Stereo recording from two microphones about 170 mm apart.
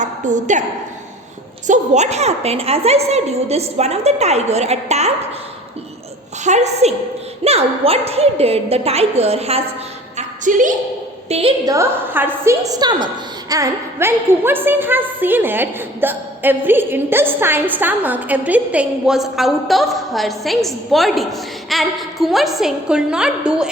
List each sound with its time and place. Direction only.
0.0 s a woman's voice: 45° right (ahead or behind)
1.6 s a woman's voice: 45° right (ahead or behind)
6.4 s a woman's voice: 40° right (ahead or behind)
10.2 s a sound: 50° right (ahead or behind)
11.3 s a woman's voice: 35° right (ahead or behind)
11.6 s a woman's voice: 20° right (ahead or behind)